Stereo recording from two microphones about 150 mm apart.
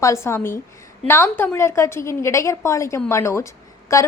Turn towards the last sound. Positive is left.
turn(degrees=20)  # may be behind; listen again after turning